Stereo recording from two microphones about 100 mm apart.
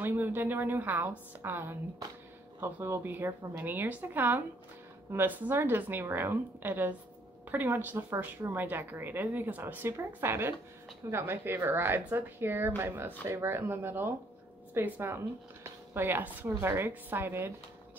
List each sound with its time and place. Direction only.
0.0 s a woman's voice: 20° right (ahead or behind)